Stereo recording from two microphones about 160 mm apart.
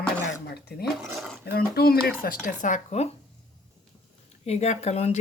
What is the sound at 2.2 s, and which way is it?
Speech, 60° left (ahead or behind).